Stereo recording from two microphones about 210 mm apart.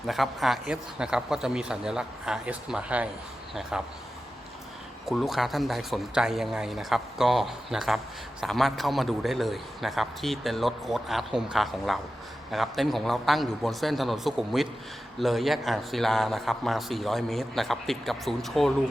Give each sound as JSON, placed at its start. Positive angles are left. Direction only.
{"t": 0.1, "sound": "speech", "side_deg": 0}
{"t": 5.0, "sound": "speech", "side_deg": 0}